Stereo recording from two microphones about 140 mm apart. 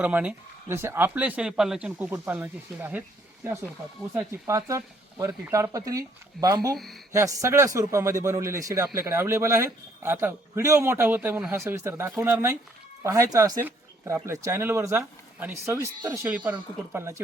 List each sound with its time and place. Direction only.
0.0 s speech: 10° right (ahead or behind)